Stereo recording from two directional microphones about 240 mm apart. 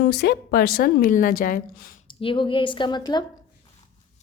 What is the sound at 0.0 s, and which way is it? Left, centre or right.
A woman's voice, left.